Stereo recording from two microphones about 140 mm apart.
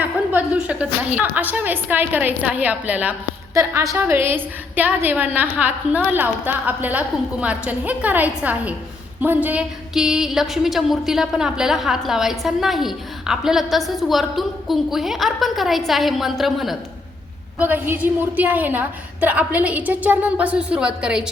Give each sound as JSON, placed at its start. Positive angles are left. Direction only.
{"t": 0.0, "sound": "a woman's voice", "side_deg": -10}
{"t": 17.6, "sound": "a woman's voice", "side_deg": -10}